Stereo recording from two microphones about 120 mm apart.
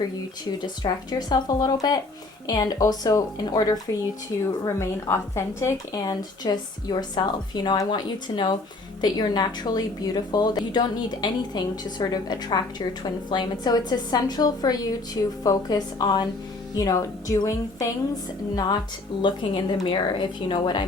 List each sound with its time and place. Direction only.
0.8 s a woman's voice: 40° left (ahead or behind); by 5.7 s 25° left (ahead or behind)
5.9 s a woman's voice: 35° left (ahead or behind)
19.2 s a woman's voice: 40° left (ahead or behind)